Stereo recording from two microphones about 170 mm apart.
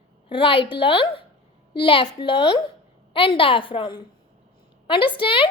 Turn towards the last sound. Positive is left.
turn(degrees=30)  # may be behind; listen again after turning